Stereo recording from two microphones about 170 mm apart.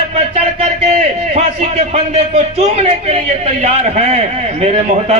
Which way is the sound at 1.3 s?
40° right (ahead or behind).